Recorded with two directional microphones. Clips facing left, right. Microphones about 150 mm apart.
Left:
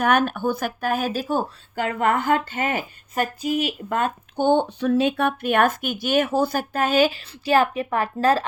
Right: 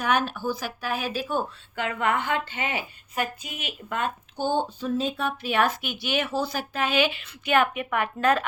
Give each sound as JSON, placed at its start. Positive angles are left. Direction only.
{"t": 0.0, "sound": "speech", "side_deg": 55}
{"t": 4.4, "sound": "speech", "side_deg": 65}